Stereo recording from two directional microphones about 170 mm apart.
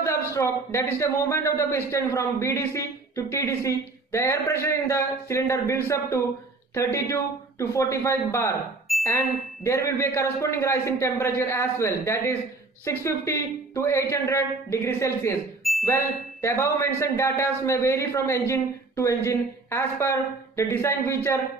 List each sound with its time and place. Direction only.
0.0 s a man's voice: 15° left (ahead or behind)
8.9 s a sound: centre (ahead or behind)
9.6 s a man's voice: 15° left (ahead or behind)